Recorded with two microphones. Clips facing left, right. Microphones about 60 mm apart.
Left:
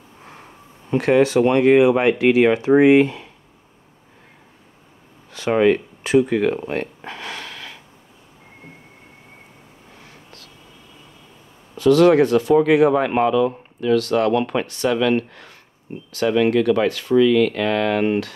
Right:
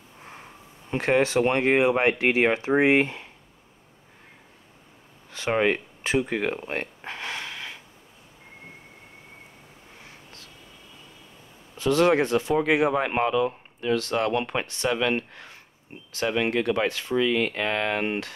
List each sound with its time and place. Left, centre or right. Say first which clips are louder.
0.9 s speech: left 6 dB; right
5.6 s speech: left 9 dB; right
6.7 s a sound: left 5 dB; right
11.8 s speech: left 7 dB; right